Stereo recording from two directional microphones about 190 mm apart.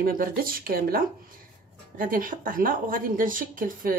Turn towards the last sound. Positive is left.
turn(degrees=-45)  # may be behind; listen again after turning